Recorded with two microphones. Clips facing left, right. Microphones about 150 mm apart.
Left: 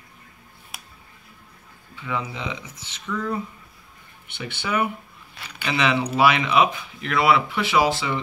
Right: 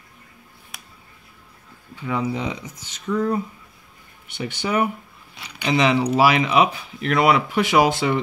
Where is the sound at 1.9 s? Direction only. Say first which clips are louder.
Right 5 dB; 40° right (ahead or behind).